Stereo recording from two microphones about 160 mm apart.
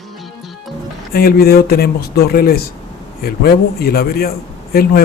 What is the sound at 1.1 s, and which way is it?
Speech, 70° left (ahead or behind).